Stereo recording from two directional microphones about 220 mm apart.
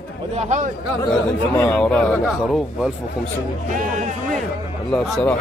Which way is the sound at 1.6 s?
5° left (ahead or behind).